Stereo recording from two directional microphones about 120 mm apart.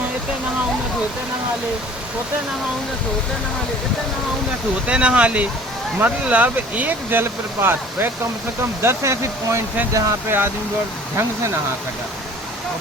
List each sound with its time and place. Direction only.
4.9 s speech: 10° right (ahead or behind)